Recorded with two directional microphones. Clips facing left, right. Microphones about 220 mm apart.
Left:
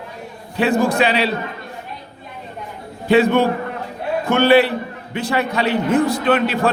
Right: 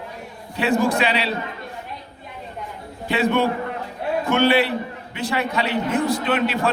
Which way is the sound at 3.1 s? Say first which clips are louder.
Left 6 dB; 45° left (ahead or behind).